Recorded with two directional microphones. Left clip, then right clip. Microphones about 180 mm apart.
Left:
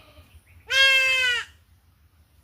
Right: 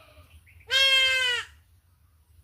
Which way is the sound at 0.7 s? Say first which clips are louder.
Left 3 dB; 15° left (ahead or behind).